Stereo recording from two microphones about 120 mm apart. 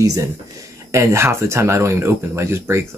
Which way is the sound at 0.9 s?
25° right (ahead or behind).